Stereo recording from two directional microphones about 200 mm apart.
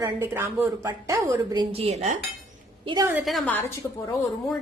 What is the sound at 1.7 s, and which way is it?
Dishes, 30° right (ahead or behind).